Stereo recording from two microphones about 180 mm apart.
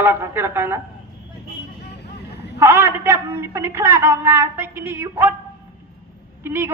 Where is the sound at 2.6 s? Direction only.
15° right (ahead or behind).